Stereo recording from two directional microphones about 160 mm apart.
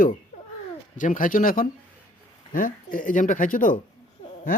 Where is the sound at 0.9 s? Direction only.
55° left (ahead or behind).